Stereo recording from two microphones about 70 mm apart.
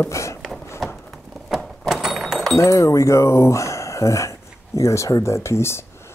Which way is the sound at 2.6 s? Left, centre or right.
Left.